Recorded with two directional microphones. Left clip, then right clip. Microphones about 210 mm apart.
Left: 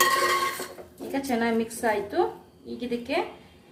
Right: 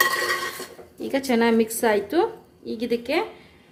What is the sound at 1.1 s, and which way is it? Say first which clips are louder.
A woman's voice: right 6 dB; 45° right (ahead or behind).